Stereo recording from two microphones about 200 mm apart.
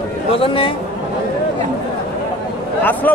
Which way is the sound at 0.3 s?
25° left (ahead or behind).